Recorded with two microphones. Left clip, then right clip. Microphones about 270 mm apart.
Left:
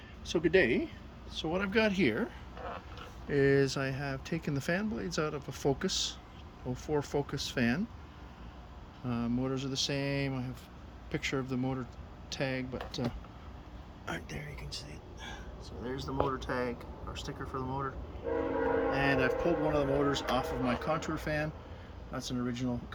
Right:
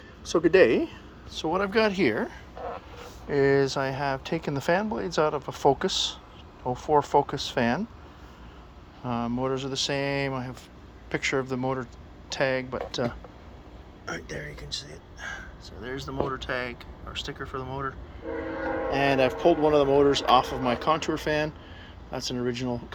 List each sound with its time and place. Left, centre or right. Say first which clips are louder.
0.3 s speech: right 8 dB; centre
9.0 s speech: right 7 dB; centre
15.9 s speech: right 3 dB; right
17.2 s speech: right 4 dB; right
18.9 s a man's voice: right 6 dB; centre